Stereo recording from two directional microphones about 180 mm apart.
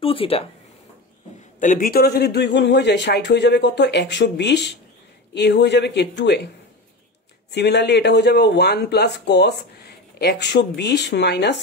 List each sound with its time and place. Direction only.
0.0 s speech: 30° left (ahead or behind)
1.6 s speech: 50° left (ahead or behind); by 6.5 s 70° left (ahead or behind)
7.5 s speech: 70° left (ahead or behind)